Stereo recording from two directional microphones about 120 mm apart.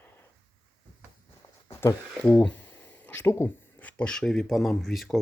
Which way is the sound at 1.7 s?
20° left (ahead or behind).